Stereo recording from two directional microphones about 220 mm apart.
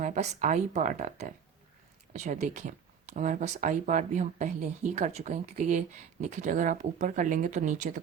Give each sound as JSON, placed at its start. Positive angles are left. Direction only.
{"t": 0.0, "sound": "speech", "side_deg": -35}